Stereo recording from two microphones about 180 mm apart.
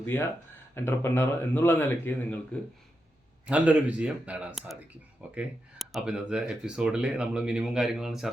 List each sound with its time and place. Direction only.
0.0 s speech: 15° left (ahead or behind)
3.4 s speech: 5° right (ahead or behind)